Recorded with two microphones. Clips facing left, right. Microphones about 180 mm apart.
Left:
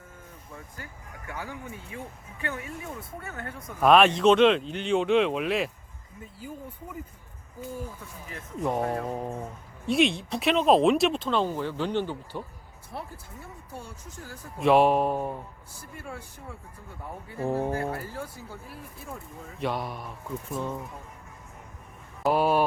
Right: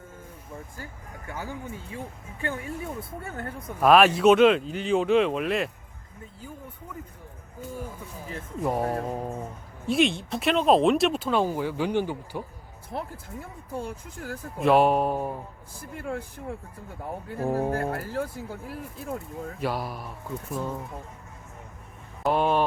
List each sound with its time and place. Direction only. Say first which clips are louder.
1.3 s speech: right 2 dB; 30° right (ahead or behind)
3.2 s music: right 2 dB; 35° right (ahead or behind)
3.8 s speech: right 1 dB; 5° right (ahead or behind)
8.8 s music: right 1 dB; 30° right (ahead or behind)
9.0 s speech: right 1 dB; 5° right (ahead or behind)
12.9 s speech: right 5 dB; 65° right (ahead or behind)
14.6 s speech: even; centre (ahead or behind)
16.0 s speech: right 9 dB; 60° right (ahead or behind)
17.3 s speech: right 1 dB; centre (ahead or behind)
17.7 s speech: right 3 dB; 70° right (ahead or behind)
19.5 s speech: left 1 dB; centre (ahead or behind)
22.2 s a sound: even; 5° left (ahead or behind)